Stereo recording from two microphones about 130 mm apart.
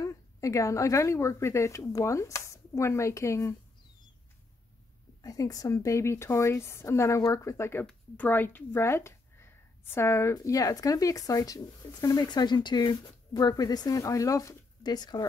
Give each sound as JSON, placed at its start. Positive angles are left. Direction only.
{"t": 0.0, "sound": "speech", "side_deg": 25}
{"t": 5.2, "sound": "speech", "side_deg": 25}